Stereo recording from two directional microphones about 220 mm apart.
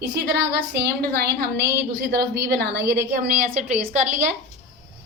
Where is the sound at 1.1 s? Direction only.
45° right (ahead or behind).